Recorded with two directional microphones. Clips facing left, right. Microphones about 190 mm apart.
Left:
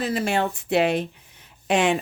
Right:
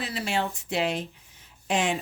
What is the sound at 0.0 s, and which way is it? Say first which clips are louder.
Speech: left 6 dB; 50° left (ahead or behind).